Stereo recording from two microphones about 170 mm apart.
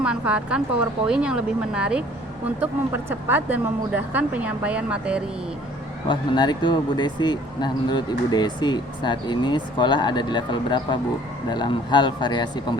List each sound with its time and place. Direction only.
0.0 s speech: 5° right (ahead or behind)
6.1 s speech: 25° left (ahead or behind)